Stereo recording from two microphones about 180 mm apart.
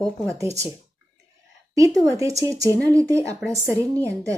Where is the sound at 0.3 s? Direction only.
15° right (ahead or behind).